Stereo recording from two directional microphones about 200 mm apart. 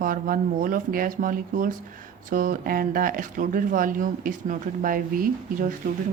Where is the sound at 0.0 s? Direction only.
45° right (ahead or behind).